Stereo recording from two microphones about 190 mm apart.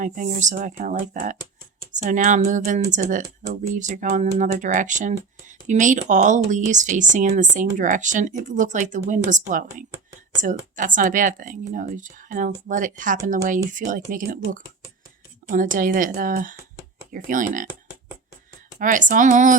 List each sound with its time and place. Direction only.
0.0 s speech: 40° right (ahead or behind)
18.8 s speech: 45° right (ahead or behind)